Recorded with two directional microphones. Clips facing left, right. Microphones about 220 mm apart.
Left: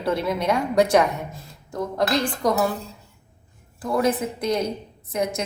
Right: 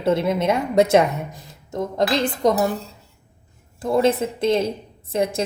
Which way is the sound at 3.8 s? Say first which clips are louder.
Right 3 dB; 25° right (ahead or behind).